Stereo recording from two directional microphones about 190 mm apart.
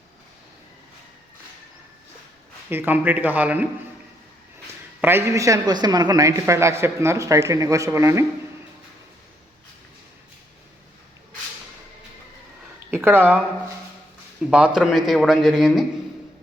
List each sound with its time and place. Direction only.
2.6 s a woman's voice: 10° right (ahead or behind)
4.9 s a woman's voice: 10° right (ahead or behind)
12.9 s speech: 10° right (ahead or behind)
14.5 s a man's voice: 5° right (ahead or behind)